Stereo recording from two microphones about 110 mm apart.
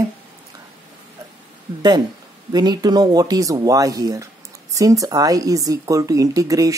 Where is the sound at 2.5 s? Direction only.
40° right (ahead or behind).